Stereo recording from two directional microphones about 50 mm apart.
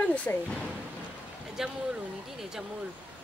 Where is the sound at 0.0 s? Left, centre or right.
Left.